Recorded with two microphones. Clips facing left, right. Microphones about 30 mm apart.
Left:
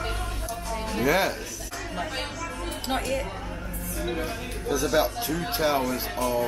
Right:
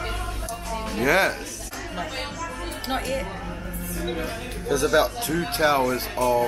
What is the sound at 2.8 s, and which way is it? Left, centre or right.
Speech, centre.